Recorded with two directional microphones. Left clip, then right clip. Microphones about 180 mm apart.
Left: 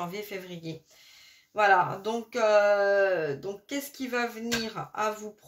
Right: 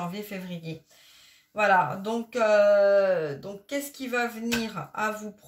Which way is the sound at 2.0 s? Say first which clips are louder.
Right 1 dB; 35° left (ahead or behind).